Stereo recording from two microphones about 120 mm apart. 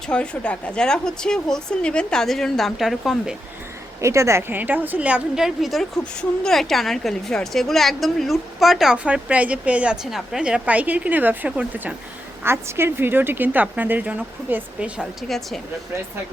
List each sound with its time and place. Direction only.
0.1 s a woman's voice: 10° left (ahead or behind)
4.0 s a woman's voice: 25° right (ahead or behind)
12.4 s a woman's voice: 20° right (ahead or behind)
15.3 s a woman's voice: centre (ahead or behind)